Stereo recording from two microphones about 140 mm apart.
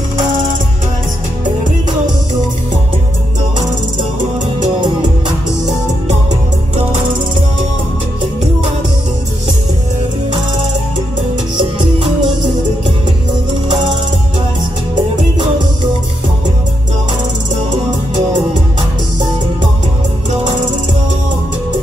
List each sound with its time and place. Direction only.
0.2 s music: 30° right (ahead or behind)
11.5 s music: 40° right (ahead or behind)
13.7 s music: 30° right (ahead or behind)